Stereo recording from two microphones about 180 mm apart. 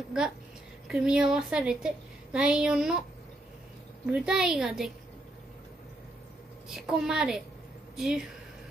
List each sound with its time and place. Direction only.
0.8 s a woman's voice: 5° right (ahead or behind)
4.0 s a woman's voice: 5° right (ahead or behind)
6.7 s a woman's voice: 5° right (ahead or behind)